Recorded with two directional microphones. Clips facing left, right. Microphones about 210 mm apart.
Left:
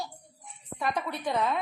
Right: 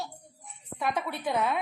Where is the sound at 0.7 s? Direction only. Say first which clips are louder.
Even; 5° right (ahead or behind).